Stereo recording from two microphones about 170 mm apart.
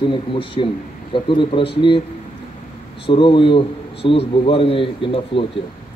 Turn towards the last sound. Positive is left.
turn(degrees=30)  # may be behind; listen again after turning